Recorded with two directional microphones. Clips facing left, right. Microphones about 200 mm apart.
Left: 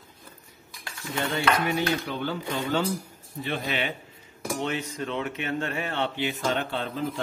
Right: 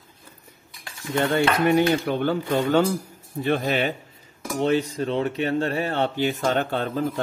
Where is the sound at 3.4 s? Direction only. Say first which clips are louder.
Right 7 dB; 45° right (ahead or behind).